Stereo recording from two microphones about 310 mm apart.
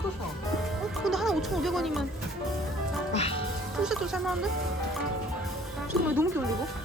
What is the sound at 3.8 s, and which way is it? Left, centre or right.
Speech, centre.